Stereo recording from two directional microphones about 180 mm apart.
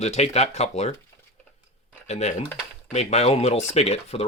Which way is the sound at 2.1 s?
40° left (ahead or behind).